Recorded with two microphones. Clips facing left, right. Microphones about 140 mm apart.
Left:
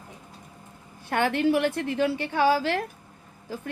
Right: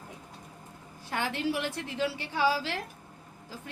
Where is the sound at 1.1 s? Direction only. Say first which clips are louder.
Left 8 dB; 60° left (ahead or behind).